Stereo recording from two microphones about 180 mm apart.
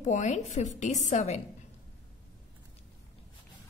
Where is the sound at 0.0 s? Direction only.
40° left (ahead or behind).